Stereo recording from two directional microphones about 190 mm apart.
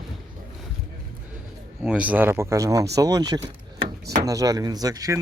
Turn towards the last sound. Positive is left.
turn(degrees=-20)  # may be behind; listen again after turning